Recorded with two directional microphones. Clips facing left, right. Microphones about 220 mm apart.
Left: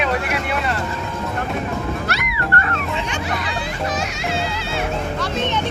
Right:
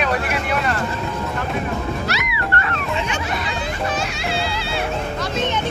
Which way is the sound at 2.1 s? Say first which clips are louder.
Right 1 dB; 55° left (ahead or behind).